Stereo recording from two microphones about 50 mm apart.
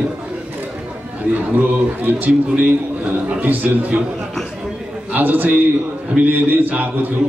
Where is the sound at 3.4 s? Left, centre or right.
Right.